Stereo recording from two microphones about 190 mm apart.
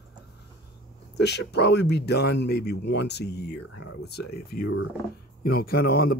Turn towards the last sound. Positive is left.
turn(degrees=55)  # may be behind; listen again after turning